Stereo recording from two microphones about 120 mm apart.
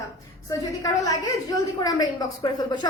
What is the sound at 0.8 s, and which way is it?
A woman's voice, 30° left (ahead or behind).